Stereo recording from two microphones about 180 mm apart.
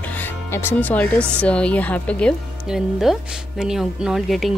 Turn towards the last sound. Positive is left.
turn(degrees=0)  # may be behind; listen again after turning